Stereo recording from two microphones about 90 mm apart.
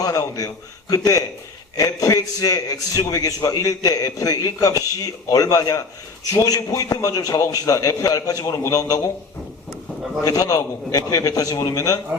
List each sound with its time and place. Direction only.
0.0 s a man's voice: 40° left (ahead or behind)
10.2 s a man's voice: 40° left (ahead or behind)